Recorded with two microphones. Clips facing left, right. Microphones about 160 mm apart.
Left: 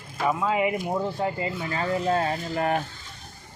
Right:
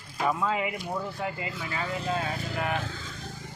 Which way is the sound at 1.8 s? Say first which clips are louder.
Left 7 dB; 45° left (ahead or behind).